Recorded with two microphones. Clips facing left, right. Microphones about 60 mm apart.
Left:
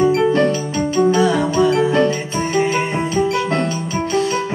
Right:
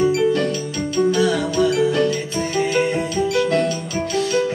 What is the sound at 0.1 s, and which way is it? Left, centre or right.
Music, left.